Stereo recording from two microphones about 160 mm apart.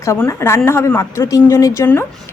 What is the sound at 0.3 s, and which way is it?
A woman's voice, 15° left (ahead or behind).